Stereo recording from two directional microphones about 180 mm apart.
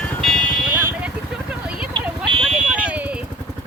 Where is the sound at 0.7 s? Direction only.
10° right (ahead or behind).